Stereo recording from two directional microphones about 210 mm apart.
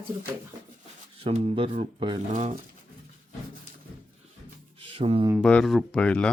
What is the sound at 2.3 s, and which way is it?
Speech, 35° right (ahead or behind).